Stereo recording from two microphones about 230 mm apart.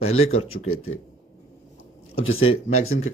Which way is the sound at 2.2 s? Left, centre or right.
Left.